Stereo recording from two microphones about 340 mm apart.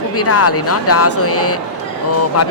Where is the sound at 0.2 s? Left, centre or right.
Left.